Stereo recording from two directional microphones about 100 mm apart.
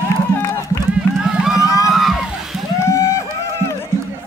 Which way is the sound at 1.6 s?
30° left (ahead or behind).